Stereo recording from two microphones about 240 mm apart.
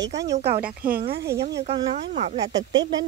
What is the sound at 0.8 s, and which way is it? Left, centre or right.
Speech, right.